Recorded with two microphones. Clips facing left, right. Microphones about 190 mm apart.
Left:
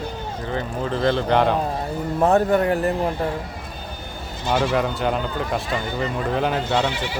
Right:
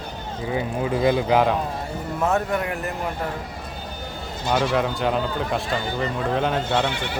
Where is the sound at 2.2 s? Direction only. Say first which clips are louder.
Left 6 dB; 35° left (ahead or behind).